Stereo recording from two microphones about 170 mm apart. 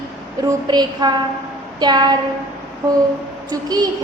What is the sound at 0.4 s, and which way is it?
A woman's voice, 25° right (ahead or behind).